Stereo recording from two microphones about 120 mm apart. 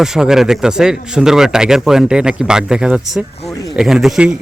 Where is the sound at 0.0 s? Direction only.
5° right (ahead or behind).